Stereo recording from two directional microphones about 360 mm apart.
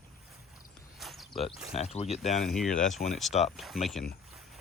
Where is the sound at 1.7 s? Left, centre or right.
Centre.